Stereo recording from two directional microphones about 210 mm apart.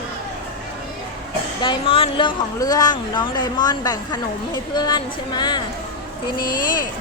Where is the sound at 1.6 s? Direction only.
25° left (ahead or behind).